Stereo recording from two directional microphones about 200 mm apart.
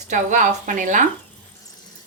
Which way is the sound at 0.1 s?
40° right (ahead or behind).